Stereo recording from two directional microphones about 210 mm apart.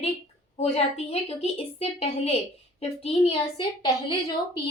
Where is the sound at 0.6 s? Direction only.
30° left (ahead or behind).